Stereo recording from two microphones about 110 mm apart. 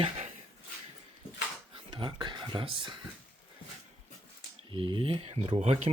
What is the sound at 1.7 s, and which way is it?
Speech, 50° right (ahead or behind).